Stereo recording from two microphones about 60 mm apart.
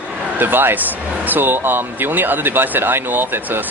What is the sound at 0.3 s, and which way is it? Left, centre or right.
Speech, right.